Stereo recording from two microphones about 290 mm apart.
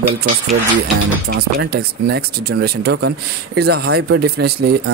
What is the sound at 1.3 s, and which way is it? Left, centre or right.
Speech, right.